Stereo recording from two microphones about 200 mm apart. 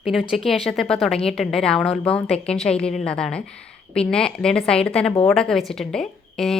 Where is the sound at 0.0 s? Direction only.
Centre (ahead or behind).